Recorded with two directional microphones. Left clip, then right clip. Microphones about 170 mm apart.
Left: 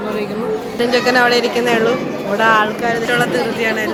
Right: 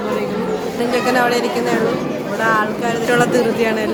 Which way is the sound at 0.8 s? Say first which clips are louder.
Left 3 dB; centre (ahead or behind).